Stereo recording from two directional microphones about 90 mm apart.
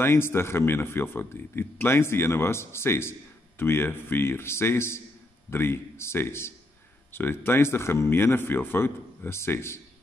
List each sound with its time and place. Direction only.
0.0 s speech: 25° left (ahead or behind)